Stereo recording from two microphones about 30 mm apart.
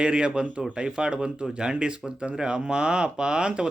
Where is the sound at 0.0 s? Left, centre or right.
Right.